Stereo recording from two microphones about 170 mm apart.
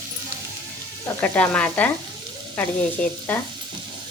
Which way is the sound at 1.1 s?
10° left (ahead or behind).